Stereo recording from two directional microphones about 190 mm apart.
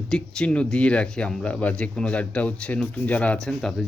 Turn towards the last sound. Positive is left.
turn(degrees=0)  # may be behind; listen again after turning